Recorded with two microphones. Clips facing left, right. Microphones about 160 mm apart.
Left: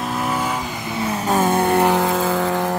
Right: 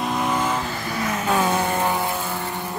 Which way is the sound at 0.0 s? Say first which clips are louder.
Even; 5° left (ahead or behind).